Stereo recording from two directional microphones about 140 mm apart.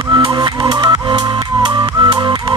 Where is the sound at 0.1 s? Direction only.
30° right (ahead or behind).